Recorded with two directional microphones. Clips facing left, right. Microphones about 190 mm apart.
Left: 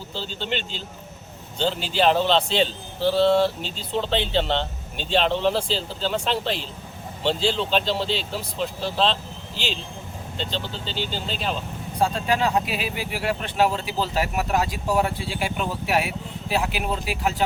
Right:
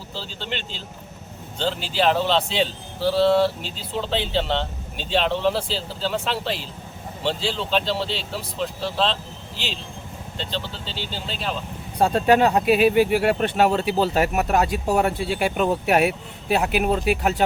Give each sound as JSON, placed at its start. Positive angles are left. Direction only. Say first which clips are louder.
{"t": 0.1, "sound": "a man's voice", "louder": "left 3 dB", "side_deg": 0}
{"t": 11.9, "sound": "speech", "louder": "right 5 dB", "side_deg": -60}